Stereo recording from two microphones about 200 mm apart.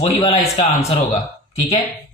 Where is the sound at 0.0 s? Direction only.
30° left (ahead or behind).